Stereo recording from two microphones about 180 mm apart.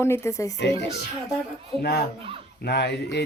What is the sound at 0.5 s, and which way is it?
Speech, 70° left (ahead or behind).